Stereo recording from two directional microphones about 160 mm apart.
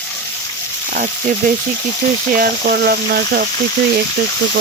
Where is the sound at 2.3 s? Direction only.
75° right (ahead or behind).